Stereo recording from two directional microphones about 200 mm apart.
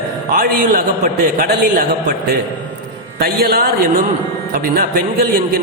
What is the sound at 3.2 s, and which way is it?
A man's voice, 50° right (ahead or behind).